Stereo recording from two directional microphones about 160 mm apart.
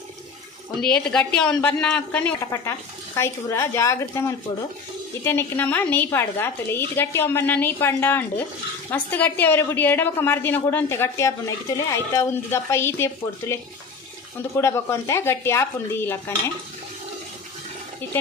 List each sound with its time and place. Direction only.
1.0 s a woman's voice: 5° left (ahead or behind)
5.2 s a woman's voice: 15° left (ahead or behind)
14.6 s a woman's voice: 15° left (ahead or behind)